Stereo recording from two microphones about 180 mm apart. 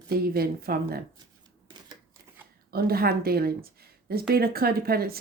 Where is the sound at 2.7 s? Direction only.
55° right (ahead or behind).